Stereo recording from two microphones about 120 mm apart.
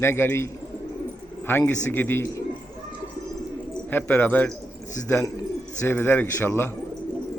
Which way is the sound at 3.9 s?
15° left (ahead or behind).